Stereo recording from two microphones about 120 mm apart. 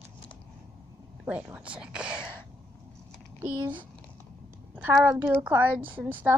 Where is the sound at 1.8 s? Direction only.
5° right (ahead or behind).